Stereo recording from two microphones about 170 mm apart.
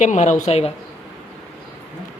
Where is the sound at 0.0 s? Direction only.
45° left (ahead or behind).